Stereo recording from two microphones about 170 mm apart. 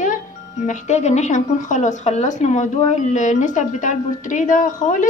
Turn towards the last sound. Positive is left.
turn(degrees=50)  # may be behind; listen again after turning